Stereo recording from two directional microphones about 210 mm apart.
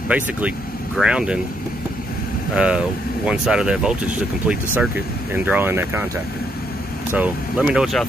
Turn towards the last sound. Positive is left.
turn(degrees=0)  # may be behind; listen again after turning